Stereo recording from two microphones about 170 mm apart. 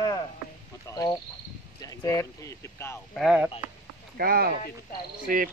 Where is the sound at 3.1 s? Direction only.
Centre (ahead or behind).